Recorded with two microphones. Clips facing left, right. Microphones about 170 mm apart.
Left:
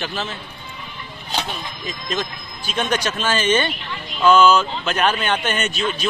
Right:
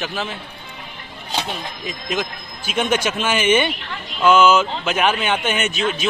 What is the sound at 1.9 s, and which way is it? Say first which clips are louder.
A man's voice: right 1 dB; 10° right (ahead or behind).